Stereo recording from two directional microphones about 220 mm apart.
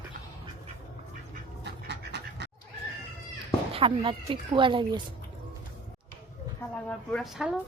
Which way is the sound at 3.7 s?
25° right (ahead or behind).